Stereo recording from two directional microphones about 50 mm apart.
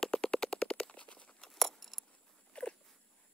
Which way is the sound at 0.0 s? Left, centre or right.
Centre.